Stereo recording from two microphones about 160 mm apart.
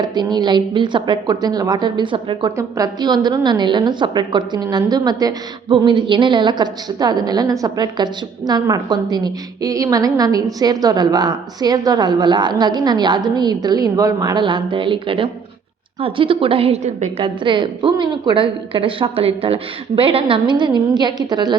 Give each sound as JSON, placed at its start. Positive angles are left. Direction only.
{"t": 0.0, "sound": "a woman's voice", "side_deg": -25}